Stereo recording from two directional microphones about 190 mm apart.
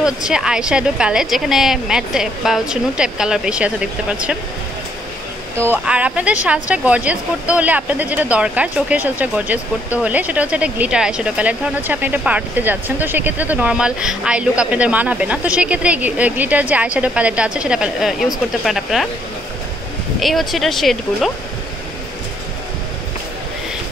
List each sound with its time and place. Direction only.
0.0 s a woman's voice: 5° right (ahead or behind)
5.6 s a woman's voice: 10° right (ahead or behind)
20.2 s a woman's voice: centre (ahead or behind)